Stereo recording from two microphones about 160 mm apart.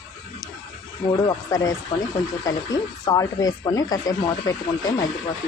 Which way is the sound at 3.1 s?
20° left (ahead or behind).